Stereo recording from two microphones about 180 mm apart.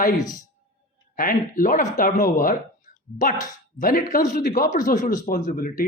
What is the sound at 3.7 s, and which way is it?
A man's voice, 50° left (ahead or behind).